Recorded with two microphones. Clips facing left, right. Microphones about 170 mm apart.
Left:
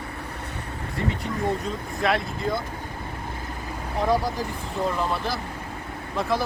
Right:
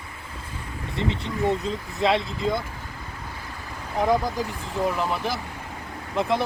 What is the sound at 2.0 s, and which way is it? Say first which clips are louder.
Speech: right 2 dB; 25° right (ahead or behind).